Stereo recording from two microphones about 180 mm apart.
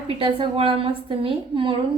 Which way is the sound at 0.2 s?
30° right (ahead or behind).